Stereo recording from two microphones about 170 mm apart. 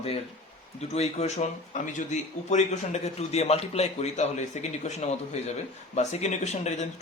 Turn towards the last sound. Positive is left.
turn(degrees=40)  # may be behind; listen again after turning